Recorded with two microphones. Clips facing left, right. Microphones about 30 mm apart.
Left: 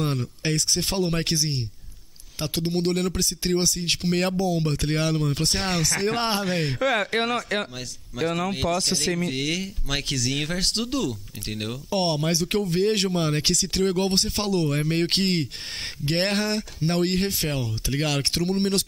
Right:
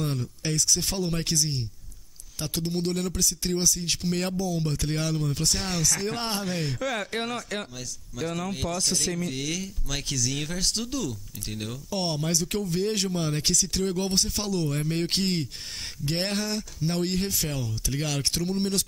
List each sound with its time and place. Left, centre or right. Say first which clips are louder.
0.0 s speech: left 4 dB; left